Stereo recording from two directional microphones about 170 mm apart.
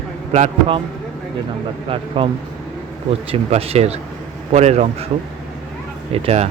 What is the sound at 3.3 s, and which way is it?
Speech, 35° right (ahead or behind).